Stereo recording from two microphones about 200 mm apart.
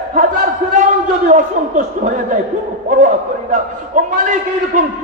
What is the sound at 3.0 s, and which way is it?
A man's voice, 40° right (ahead or behind).